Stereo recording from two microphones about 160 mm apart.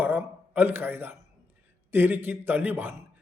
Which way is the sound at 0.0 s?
15° right (ahead or behind).